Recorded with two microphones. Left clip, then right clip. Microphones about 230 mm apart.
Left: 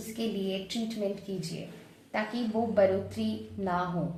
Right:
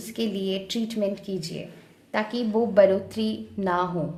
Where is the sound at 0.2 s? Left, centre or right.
Right.